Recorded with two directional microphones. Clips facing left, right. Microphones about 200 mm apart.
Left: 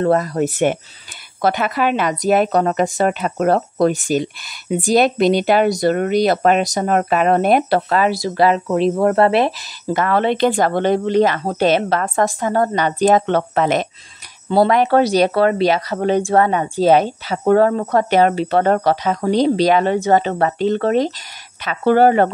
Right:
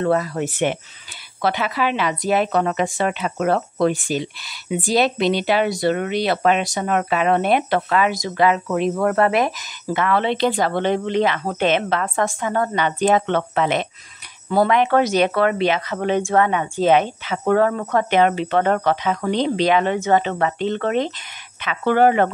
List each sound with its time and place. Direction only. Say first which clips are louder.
0.0 s a woman's voice: left 4 dB; 40° left (ahead or behind)